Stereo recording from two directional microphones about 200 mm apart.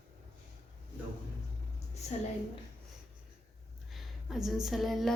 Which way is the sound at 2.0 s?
35° left (ahead or behind).